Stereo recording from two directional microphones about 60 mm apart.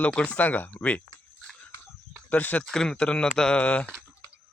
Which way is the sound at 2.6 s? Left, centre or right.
Centre.